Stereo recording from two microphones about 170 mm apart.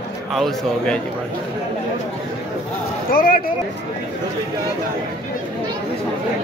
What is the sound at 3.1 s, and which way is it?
Speech, 55° left (ahead or behind).